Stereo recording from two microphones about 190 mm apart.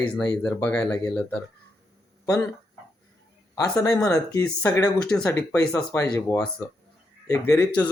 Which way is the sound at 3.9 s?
5° left (ahead or behind).